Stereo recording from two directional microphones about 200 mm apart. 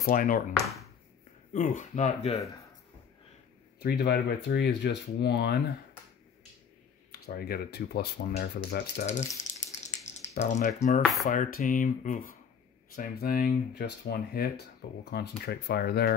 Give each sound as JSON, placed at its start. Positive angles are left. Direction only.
{"t": 0.0, "sound": "speech", "side_deg": 45}
{"t": 3.8, "sound": "speech", "side_deg": 55}
{"t": 7.1, "sound": "speech", "side_deg": 50}
{"t": 9.0, "sound": "speech", "side_deg": 35}
{"t": 9.7, "sound": "a sound", "side_deg": 35}
{"t": 10.4, "sound": "speech", "side_deg": 35}